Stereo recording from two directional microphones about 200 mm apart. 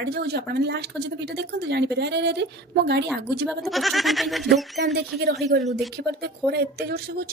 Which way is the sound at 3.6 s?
Centre (ahead or behind).